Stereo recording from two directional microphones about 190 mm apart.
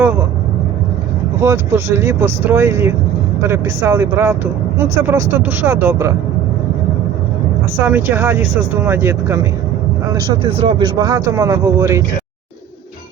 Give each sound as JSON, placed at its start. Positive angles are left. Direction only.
{"t": 1.4, "sound": "speech", "side_deg": -10}
{"t": 7.8, "sound": "speech", "side_deg": -10}
{"t": 10.4, "sound": "speech", "side_deg": -25}